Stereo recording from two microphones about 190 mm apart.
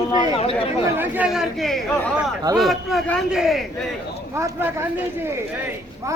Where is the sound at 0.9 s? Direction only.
10° right (ahead or behind).